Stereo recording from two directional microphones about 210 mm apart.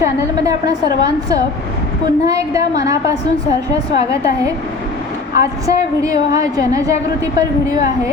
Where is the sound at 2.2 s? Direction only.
15° right (ahead or behind).